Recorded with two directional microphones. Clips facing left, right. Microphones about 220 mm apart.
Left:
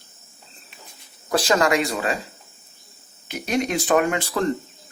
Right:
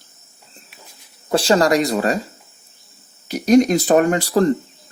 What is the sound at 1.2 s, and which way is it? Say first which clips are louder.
Speech: right 4 dB; 30° right (ahead or behind).